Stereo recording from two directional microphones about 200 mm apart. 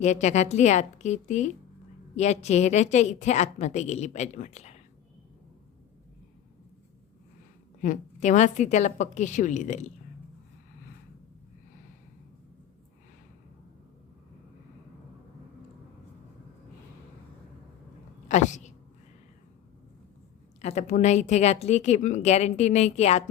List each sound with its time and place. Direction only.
0.0 s speech: 35° left (ahead or behind)
7.8 s speech: 40° left (ahead or behind)
18.3 s speech: 35° left (ahead or behind)
20.6 s speech: 35° left (ahead or behind)